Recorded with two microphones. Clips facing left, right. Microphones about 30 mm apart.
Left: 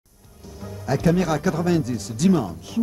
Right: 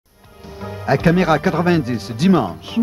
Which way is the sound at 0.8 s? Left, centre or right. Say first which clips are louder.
Right 6 dB; right.